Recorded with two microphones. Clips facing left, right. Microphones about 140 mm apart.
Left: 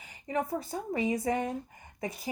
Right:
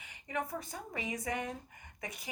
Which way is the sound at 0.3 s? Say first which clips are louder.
Left 6 dB; 35° left (ahead or behind).